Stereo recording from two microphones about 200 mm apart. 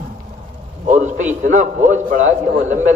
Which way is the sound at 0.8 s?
35° right (ahead or behind).